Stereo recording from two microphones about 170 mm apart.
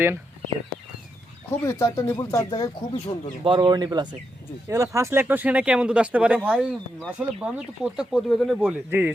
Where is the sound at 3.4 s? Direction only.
30° right (ahead or behind).